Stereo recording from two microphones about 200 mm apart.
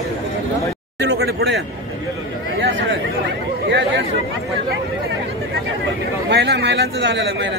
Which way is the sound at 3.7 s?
60° right (ahead or behind).